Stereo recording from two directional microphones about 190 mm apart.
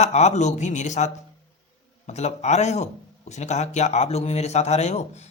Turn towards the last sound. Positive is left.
turn(degrees=35)  # may be behind; listen again after turning